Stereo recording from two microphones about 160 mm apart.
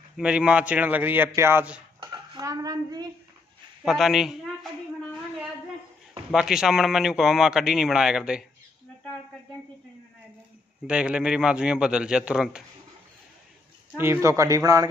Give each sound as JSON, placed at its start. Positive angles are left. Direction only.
{"t": 0.2, "sound": "a man's voice", "side_deg": -5}
{"t": 2.0, "sound": "dishes", "side_deg": -25}
{"t": 3.8, "sound": "a woman's voice", "side_deg": 0}
{"t": 6.3, "sound": "speech", "side_deg": -5}
{"t": 10.9, "sound": "speech", "side_deg": -5}
{"t": 13.9, "sound": "speech", "side_deg": -15}